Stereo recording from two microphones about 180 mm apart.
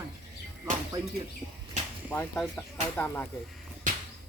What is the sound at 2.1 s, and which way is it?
Speech, 5° left (ahead or behind).